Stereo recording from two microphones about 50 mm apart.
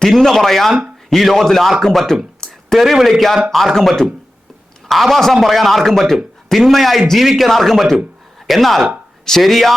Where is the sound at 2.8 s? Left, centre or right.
Centre.